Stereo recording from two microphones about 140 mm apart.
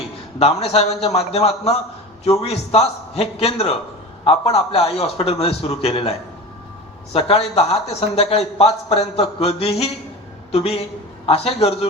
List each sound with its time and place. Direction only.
0.3 s speech: 45° left (ahead or behind)